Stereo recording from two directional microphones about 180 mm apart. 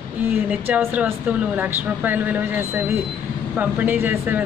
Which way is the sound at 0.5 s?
10° right (ahead or behind).